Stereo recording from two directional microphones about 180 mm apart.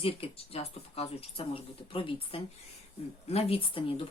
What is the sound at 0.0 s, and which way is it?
Speech, 30° left (ahead or behind).